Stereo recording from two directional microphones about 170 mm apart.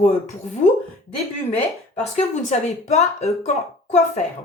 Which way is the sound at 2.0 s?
40° left (ahead or behind).